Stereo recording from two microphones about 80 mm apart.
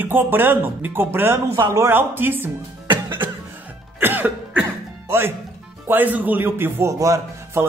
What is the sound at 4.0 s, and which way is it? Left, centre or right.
Cough, right.